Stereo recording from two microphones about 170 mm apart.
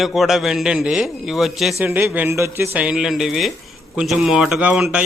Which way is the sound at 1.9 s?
10° right (ahead or behind).